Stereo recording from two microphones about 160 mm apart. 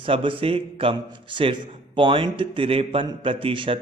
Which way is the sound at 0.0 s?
35° right (ahead or behind).